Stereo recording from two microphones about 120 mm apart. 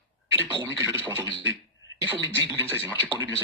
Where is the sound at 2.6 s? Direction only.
20° right (ahead or behind).